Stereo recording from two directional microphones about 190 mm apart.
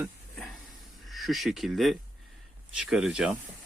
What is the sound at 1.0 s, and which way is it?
Speech, centre (ahead or behind).